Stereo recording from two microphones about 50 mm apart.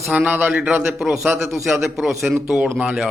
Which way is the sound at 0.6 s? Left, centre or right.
Right.